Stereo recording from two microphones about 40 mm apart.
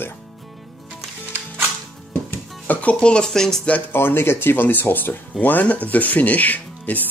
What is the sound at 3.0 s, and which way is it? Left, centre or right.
Speech, left.